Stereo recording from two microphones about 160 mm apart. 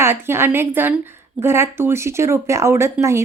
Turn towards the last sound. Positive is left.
turn(degrees=-15)  # may be behind; listen again after turning